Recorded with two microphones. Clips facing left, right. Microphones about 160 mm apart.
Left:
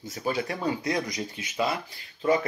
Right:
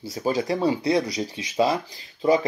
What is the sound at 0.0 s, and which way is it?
Speech, 35° right (ahead or behind).